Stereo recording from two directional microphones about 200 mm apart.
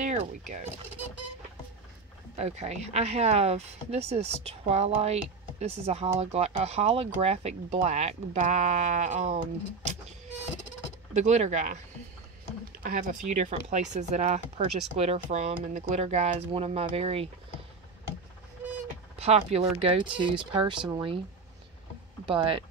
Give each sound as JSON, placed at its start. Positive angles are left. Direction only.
{"t": 0.0, "sound": "a sound", "side_deg": -40}
{"t": 2.3, "sound": "speech", "side_deg": -35}
{"t": 11.1, "sound": "speech", "side_deg": -35}
{"t": 12.8, "sound": "speech", "side_deg": -40}
{"t": 18.6, "sound": "a sound", "side_deg": -10}
{"t": 19.1, "sound": "speech", "side_deg": -30}
{"t": 22.2, "sound": "speech", "side_deg": -25}